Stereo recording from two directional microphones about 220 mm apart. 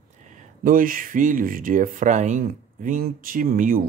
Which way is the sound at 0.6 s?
40° right (ahead or behind).